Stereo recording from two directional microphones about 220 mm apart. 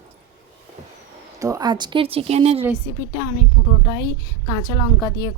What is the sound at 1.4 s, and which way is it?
Speech, 15° right (ahead or behind).